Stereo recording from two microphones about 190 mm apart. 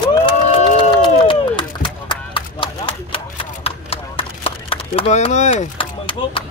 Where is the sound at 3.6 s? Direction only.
30° left (ahead or behind).